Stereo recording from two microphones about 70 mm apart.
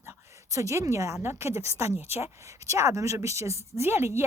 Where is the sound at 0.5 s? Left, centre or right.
Right.